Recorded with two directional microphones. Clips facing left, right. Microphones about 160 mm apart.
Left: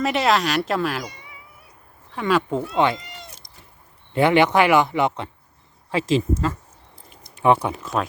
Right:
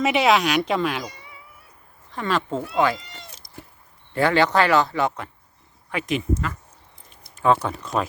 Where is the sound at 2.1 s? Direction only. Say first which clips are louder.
Left 3 dB; 10° left (ahead or behind).